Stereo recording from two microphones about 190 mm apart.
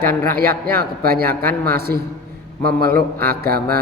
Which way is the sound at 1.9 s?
10° left (ahead or behind).